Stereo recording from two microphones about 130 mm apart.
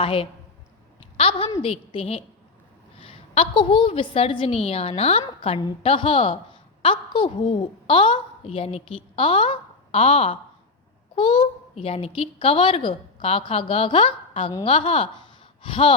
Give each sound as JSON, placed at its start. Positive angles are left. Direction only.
{"t": 0.0, "sound": "a child's voice", "side_deg": 40}